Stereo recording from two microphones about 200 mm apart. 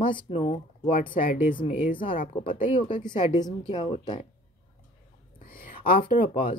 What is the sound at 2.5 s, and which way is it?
Speech, 45° left (ahead or behind).